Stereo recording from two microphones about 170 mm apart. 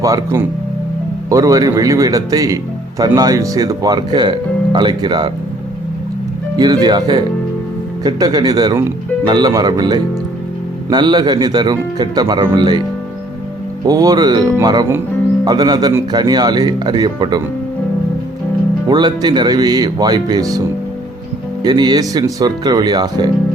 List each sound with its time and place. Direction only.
0.0 s speech: 20° right (ahead or behind)
6.6 s speech: 25° right (ahead or behind)
13.8 s speech: 20° right (ahead or behind)
18.9 s speech: 25° right (ahead or behind)